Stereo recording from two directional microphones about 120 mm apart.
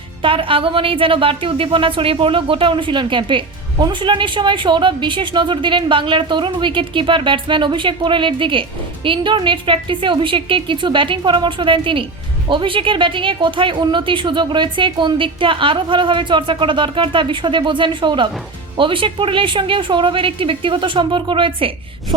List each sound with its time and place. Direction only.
0.2 s speech: 45° right (ahead or behind)